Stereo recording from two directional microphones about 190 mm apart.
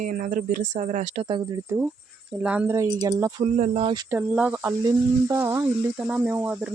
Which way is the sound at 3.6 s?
30° right (ahead or behind).